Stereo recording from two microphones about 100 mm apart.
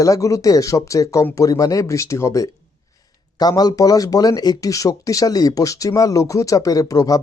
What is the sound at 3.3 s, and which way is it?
Speech, 40° left (ahead or behind).